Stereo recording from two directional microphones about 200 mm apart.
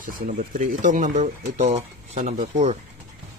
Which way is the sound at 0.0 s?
40° right (ahead or behind).